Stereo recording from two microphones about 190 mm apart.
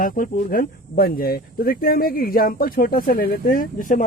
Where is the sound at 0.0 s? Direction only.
45° left (ahead or behind).